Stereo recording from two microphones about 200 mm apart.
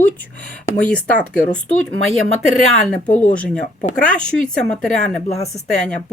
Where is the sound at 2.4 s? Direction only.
35° left (ahead or behind).